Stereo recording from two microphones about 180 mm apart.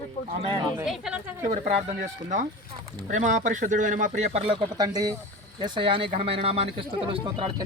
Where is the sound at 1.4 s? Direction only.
40° right (ahead or behind).